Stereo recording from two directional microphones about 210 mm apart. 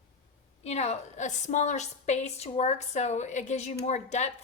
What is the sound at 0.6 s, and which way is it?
A woman's voice, 30° left (ahead or behind).